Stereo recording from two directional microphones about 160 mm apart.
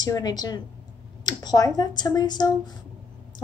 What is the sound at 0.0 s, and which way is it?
A woman's voice, 25° left (ahead or behind).